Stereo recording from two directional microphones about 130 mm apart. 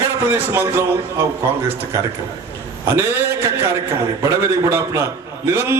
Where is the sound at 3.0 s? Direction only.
20° right (ahead or behind).